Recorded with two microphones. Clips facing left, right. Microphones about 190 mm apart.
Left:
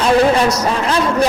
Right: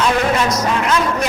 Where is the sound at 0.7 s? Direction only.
30° left (ahead or behind).